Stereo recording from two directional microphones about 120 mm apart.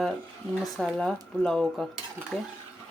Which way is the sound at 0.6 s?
5° left (ahead or behind).